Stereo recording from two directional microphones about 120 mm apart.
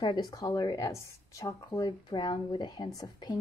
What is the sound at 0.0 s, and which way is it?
Speech, 35° left (ahead or behind).